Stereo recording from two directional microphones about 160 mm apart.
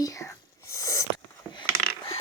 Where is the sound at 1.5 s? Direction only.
30° left (ahead or behind).